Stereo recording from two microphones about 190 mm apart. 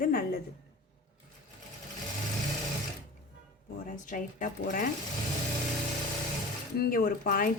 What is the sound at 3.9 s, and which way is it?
Speech, 45° left (ahead or behind).